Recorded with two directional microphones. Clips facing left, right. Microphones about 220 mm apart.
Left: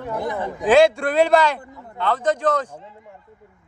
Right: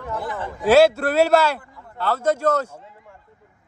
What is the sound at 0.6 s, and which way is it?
Speech, 5° right (ahead or behind).